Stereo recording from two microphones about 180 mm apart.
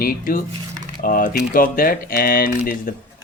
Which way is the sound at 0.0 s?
50° left (ahead or behind).